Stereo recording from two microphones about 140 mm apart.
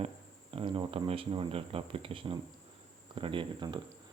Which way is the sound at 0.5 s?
35° right (ahead or behind).